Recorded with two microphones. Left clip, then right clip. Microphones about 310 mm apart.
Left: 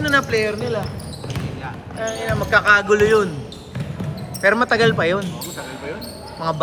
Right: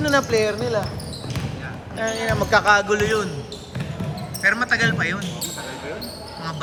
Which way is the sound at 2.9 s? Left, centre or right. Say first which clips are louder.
Left 6 dB; centre.